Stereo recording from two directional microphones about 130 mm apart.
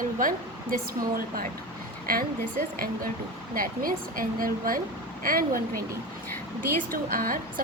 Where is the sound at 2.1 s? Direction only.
90° right.